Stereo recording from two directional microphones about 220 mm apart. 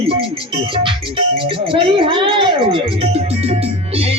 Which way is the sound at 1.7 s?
25° right (ahead or behind).